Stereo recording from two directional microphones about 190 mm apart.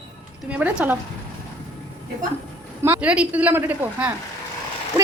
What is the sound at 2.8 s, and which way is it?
A woman's voice, 10° right (ahead or behind).